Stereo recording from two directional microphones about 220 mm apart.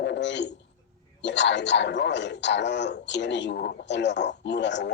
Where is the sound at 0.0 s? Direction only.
55° left (ahead or behind).